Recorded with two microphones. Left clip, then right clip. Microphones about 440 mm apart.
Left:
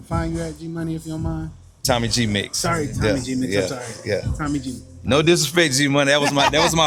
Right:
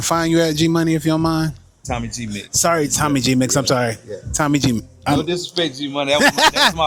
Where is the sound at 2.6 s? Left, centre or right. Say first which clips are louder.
Right 10 dB; right.